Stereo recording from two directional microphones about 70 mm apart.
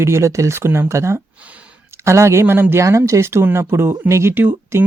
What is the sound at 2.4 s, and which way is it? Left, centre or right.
Speech, right.